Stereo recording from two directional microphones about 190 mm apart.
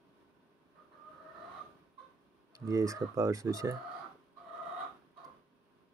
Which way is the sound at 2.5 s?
15° right (ahead or behind).